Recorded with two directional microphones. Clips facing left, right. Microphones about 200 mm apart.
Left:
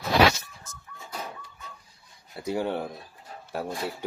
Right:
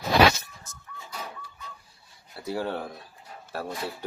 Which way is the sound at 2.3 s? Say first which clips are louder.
Left 2 dB; 15° left (ahead or behind).